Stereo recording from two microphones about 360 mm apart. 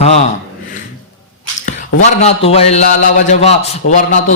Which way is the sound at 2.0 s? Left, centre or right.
Centre.